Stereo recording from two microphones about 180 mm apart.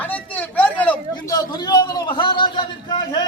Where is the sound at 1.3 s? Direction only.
20° left (ahead or behind).